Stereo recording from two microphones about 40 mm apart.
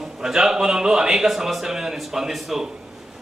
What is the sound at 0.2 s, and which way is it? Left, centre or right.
A man's voice, centre.